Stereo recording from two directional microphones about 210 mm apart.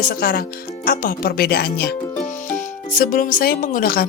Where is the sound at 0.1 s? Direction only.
45° left (ahead or behind).